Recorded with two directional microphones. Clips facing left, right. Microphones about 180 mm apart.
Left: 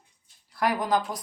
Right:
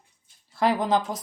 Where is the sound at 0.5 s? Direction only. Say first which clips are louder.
Right 3 dB; 25° right (ahead or behind).